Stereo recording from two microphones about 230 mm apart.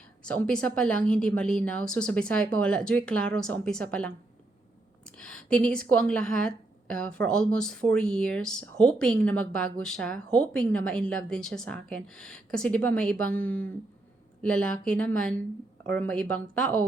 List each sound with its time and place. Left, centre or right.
0.3 s a woman's voice: centre
5.1 s a woman's voice: centre